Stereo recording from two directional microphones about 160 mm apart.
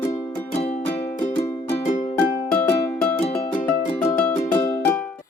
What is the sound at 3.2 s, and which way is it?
Music, 40° left (ahead or behind).